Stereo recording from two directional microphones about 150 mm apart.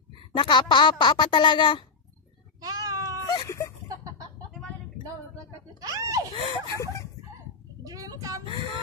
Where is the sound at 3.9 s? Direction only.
20° right (ahead or behind).